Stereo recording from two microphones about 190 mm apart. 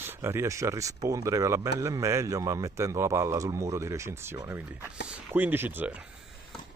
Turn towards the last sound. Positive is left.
turn(degrees=-10)  # may be behind; listen again after turning